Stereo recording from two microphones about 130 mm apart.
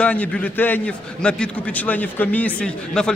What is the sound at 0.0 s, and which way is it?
A man's voice, 10° left (ahead or behind).